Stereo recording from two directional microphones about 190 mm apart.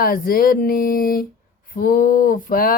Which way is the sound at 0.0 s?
50° left (ahead or behind).